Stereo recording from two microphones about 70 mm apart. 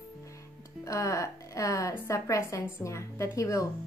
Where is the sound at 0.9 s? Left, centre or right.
Left.